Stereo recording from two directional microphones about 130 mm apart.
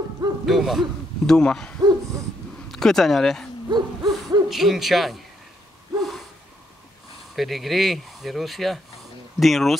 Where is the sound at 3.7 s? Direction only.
30° right (ahead or behind).